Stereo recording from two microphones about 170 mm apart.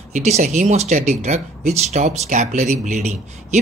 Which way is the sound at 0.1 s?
45° right (ahead or behind).